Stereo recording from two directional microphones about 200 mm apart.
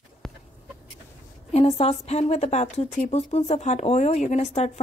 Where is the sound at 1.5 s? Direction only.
30° left (ahead or behind).